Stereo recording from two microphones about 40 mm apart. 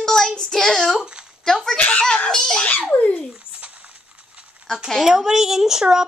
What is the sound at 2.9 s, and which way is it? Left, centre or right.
Speech, left.